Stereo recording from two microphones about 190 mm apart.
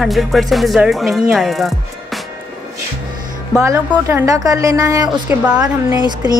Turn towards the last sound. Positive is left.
turn(degrees=-15)  # may be behind; listen again after turning